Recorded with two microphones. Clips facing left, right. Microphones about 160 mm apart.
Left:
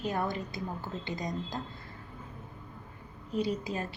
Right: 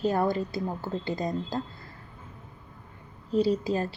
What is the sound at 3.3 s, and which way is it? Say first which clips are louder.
Speech: right 7 dB; 30° right (ahead or behind).